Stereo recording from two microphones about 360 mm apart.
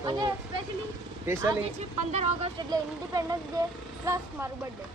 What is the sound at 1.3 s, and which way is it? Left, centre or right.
Speech, centre.